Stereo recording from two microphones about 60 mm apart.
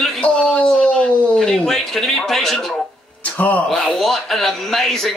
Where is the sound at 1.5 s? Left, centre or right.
Centre.